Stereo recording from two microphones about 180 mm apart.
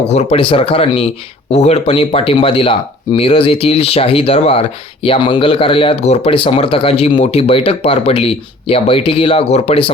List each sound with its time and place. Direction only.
0.0 s speech: 35° left (ahead or behind)